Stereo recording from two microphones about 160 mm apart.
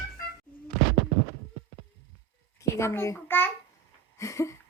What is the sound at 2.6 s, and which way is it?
Speech, 15° left (ahead or behind).